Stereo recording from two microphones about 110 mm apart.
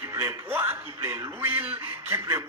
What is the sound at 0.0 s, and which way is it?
A man's voice, 25° right (ahead or behind).